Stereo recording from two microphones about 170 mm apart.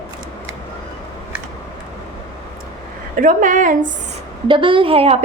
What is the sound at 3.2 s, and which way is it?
Speech, 50° right (ahead or behind).